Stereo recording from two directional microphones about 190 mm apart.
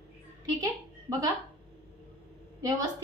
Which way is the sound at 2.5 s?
20° right (ahead or behind).